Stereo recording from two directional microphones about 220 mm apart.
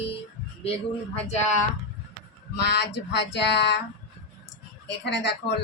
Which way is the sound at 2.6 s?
50° left (ahead or behind).